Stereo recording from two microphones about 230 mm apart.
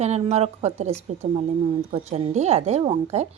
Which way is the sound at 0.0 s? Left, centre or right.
Right.